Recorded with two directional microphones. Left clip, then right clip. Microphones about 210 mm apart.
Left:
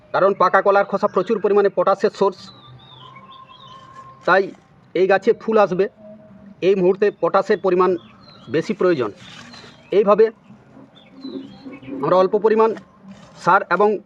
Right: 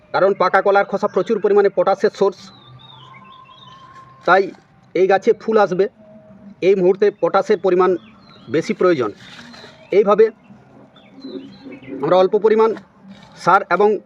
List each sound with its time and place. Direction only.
0.1 s a man's voice: 15° right (ahead or behind)
4.3 s a man's voice: 15° right (ahead or behind)
11.9 s a man's voice: 15° right (ahead or behind)